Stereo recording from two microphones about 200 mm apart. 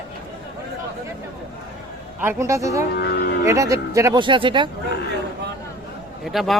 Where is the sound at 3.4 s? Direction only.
15° right (ahead or behind).